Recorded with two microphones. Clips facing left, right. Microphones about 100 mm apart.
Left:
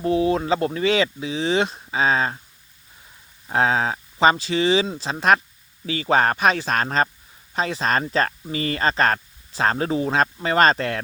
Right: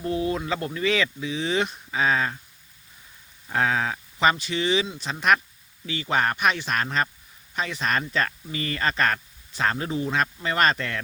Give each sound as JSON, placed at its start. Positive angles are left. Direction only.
{"t": 0.0, "sound": "speech", "side_deg": 25}
{"t": 3.5, "sound": "speech", "side_deg": 30}